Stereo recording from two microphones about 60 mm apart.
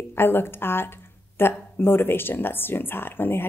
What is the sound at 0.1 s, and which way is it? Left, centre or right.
A woman's voice, left.